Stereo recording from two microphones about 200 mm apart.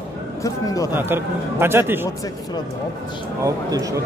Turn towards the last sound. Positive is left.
turn(degrees=-15)  # may be behind; listen again after turning